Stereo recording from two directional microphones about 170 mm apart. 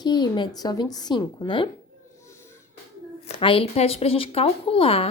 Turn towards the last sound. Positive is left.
turn(degrees=35)  # may be behind; listen again after turning